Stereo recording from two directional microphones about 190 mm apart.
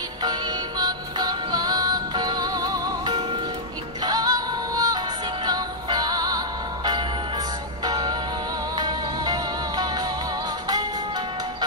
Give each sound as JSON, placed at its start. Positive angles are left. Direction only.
{"t": 0.2, "sound": "music", "side_deg": -20}